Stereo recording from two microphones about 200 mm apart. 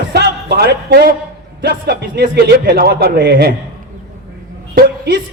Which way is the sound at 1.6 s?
55° right (ahead or behind).